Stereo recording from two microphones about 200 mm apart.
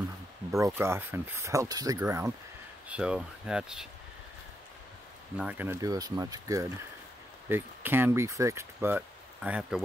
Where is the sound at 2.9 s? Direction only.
5° right (ahead or behind).